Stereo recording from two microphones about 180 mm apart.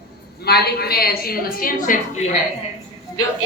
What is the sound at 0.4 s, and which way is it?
Speech, 60° left (ahead or behind).